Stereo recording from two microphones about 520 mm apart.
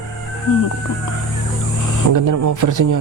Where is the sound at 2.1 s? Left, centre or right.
Right.